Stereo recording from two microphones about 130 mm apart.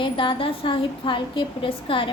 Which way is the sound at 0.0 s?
40° left (ahead or behind).